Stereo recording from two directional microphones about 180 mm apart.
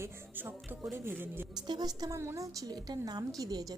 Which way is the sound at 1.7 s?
20° right (ahead or behind).